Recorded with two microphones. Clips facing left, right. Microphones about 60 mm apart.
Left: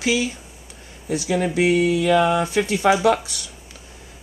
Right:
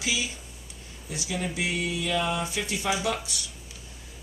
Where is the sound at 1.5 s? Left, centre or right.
Left.